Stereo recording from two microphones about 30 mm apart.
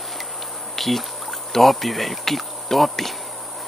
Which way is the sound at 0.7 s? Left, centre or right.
Centre.